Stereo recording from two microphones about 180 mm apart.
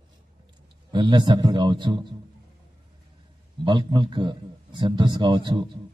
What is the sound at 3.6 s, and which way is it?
A man's voice, 25° right (ahead or behind).